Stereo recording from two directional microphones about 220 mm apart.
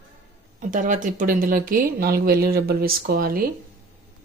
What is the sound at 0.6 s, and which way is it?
Speech, 35° right (ahead or behind).